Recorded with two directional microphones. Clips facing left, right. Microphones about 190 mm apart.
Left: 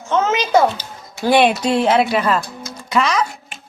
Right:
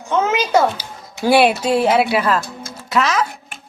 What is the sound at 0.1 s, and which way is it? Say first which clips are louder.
A child's voice: left 1 dB; 10° right (ahead or behind).